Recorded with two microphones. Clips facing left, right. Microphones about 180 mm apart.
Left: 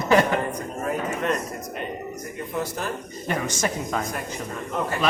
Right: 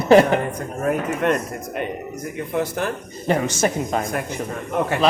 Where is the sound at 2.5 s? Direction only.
60° right (ahead or behind).